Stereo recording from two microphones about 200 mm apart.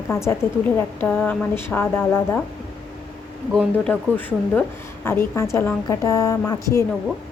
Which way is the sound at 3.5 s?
5° left (ahead or behind).